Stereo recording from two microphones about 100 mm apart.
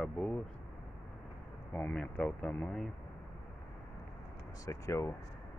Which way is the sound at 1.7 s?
15° left (ahead or behind).